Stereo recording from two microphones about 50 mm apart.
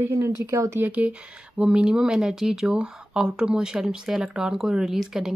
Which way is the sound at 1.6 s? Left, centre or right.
Right.